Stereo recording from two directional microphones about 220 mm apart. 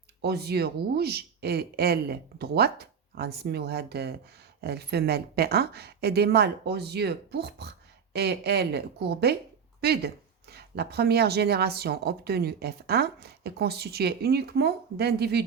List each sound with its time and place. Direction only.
0.2 s a woman's voice: 45° right (ahead or behind)